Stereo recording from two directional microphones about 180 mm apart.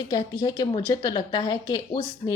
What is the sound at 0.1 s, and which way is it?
A woman's voice, 20° left (ahead or behind).